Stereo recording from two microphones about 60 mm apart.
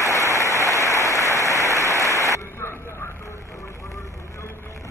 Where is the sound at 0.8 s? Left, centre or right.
Left.